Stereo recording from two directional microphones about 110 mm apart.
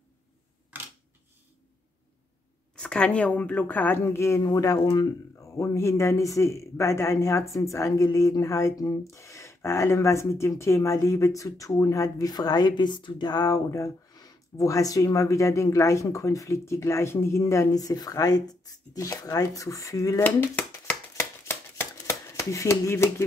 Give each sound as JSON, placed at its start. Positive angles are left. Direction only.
{"t": 0.7, "sound": "camera", "side_deg": -20}
{"t": 2.7, "sound": "a woman's voice", "side_deg": 10}
{"t": 4.8, "sound": "speech", "side_deg": 45}
{"t": 5.4, "sound": "speech", "side_deg": 25}
{"t": 21.2, "sound": "shuffling cards", "side_deg": 25}